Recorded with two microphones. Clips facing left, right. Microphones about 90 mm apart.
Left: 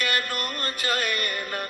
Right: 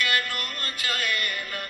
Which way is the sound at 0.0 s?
35° left (ahead or behind).